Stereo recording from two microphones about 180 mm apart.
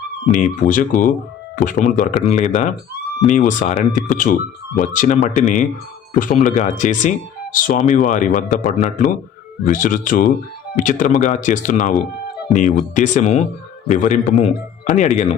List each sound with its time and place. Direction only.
0.3 s speech: 45° left (ahead or behind)